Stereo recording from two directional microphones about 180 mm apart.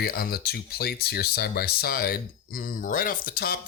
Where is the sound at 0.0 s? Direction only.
60° left (ahead or behind).